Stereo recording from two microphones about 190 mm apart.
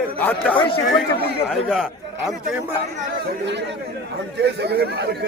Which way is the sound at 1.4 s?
Centre (ahead or behind).